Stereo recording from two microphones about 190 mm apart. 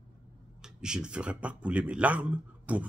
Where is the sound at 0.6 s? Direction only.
5° right (ahead or behind).